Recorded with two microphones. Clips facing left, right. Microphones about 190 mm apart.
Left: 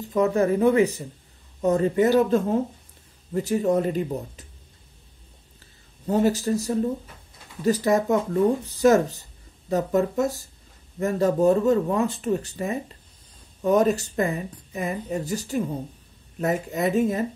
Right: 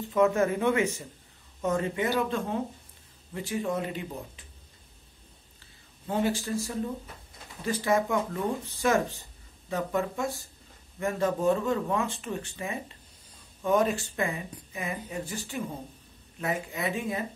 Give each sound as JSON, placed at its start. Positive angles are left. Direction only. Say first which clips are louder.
{"t": 0.0, "sound": "speech", "louder": "left 3 dB", "side_deg": 35}
{"t": 6.0, "sound": "speech", "louder": "left 7 dB", "side_deg": 40}